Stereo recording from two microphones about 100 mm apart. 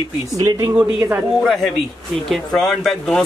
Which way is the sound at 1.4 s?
Centre (ahead or behind).